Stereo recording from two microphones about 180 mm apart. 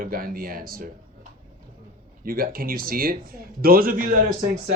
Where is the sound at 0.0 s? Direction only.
55° right (ahead or behind).